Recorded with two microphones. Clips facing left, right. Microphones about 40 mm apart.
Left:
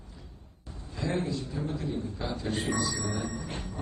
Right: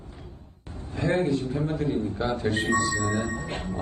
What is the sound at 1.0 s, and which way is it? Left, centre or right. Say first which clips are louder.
Speech: right 7 dB; right.